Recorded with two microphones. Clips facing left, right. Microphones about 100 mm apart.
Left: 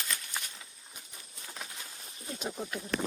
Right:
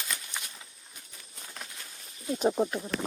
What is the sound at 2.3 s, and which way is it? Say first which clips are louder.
Speech: right 12 dB; 45° right (ahead or behind).